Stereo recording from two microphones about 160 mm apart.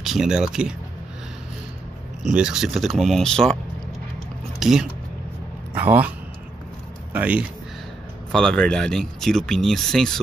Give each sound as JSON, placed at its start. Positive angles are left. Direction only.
{"t": 0.0, "sound": "speech", "side_deg": 0}
{"t": 2.2, "sound": "speech", "side_deg": -5}
{"t": 4.6, "sound": "a man's voice", "side_deg": -5}
{"t": 8.3, "sound": "speech", "side_deg": 5}